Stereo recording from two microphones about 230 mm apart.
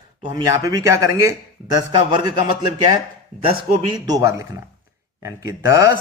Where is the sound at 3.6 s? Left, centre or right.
Centre.